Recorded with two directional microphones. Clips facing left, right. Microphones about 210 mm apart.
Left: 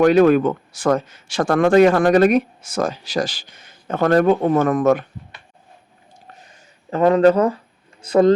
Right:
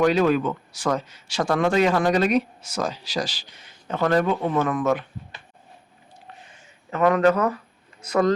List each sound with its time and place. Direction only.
0.0 s speech: 55° left (ahead or behind)
6.4 s a sound: 35° left (ahead or behind)
8.0 s speech: 30° left (ahead or behind)